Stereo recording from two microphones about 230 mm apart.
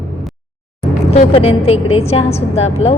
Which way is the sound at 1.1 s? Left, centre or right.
Left.